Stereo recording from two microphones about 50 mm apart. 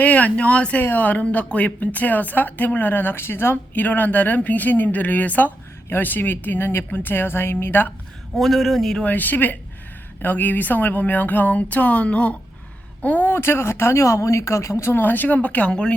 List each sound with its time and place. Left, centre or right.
0.0 s speech: left
0.8 s speech: left
3.8 s a woman's voice: left
8.4 s speech: centre
9.0 s speech: left
13.3 s speech: left
15.7 s speech: centre